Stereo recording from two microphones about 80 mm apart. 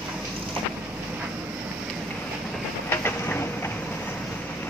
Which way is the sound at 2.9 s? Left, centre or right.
Left.